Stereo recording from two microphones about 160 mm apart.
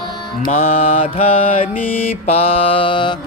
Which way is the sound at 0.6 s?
40° left (ahead or behind).